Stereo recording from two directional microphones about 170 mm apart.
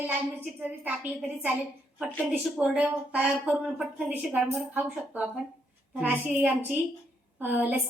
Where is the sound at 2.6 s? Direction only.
5° right (ahead or behind).